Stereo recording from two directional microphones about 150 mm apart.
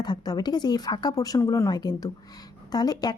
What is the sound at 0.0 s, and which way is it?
Speech, 25° left (ahead or behind).